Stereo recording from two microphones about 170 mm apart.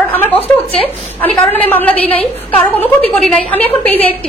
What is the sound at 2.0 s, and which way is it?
Speech, 35° left (ahead or behind).